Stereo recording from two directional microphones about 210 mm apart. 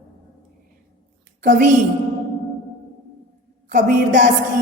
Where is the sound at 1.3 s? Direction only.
40° right (ahead or behind).